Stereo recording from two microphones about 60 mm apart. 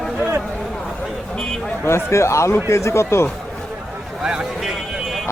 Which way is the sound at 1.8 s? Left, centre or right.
Left.